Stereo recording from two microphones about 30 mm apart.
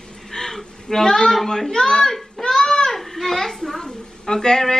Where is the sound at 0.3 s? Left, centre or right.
Centre.